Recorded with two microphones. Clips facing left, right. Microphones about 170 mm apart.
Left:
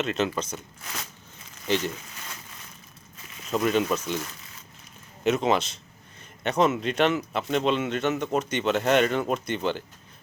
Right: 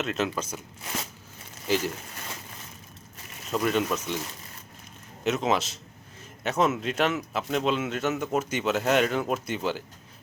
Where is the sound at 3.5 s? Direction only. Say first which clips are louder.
Left 2 dB; centre (ahead or behind).